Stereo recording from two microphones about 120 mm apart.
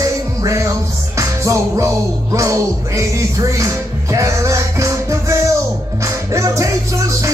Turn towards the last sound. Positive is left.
turn(degrees=-25)  # may be behind; listen again after turning